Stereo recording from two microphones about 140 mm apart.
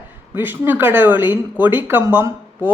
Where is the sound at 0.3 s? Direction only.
15° right (ahead or behind).